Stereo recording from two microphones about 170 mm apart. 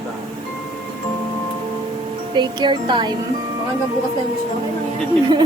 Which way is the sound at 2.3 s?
25° right (ahead or behind).